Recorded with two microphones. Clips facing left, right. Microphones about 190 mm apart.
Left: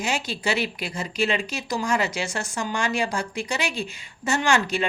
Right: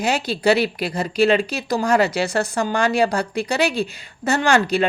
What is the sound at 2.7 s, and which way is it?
Speech, 35° right (ahead or behind).